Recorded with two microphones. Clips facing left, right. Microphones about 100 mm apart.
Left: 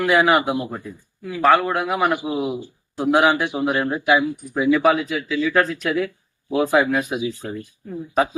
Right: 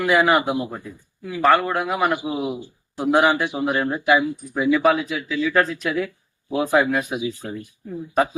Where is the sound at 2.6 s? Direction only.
10° right (ahead or behind).